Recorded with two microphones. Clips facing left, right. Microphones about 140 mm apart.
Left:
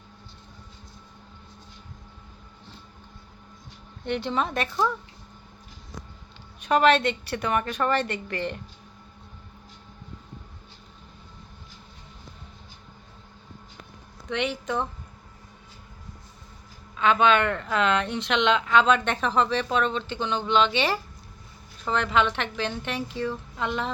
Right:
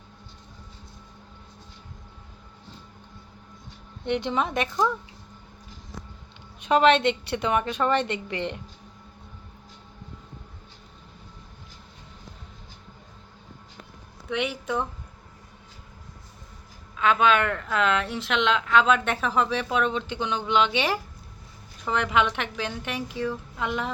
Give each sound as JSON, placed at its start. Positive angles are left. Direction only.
{"t": 4.0, "sound": "a woman's voice", "side_deg": -20}
{"t": 6.6, "sound": "a woman's voice", "side_deg": -20}
{"t": 14.3, "sound": "a woman's voice", "side_deg": -5}
{"t": 17.0, "sound": "a woman's voice", "side_deg": -5}